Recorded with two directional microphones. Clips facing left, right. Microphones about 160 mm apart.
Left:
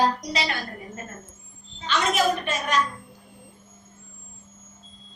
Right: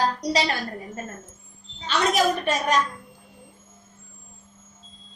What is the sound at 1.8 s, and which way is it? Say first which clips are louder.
Speech: right 1 dB; 35° right (ahead or behind).